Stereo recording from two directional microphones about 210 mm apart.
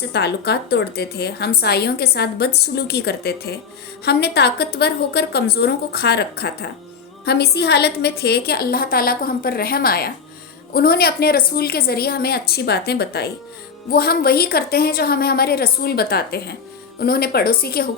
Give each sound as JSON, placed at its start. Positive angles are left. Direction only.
{"t": 0.1, "sound": "a woman's voice", "side_deg": 50}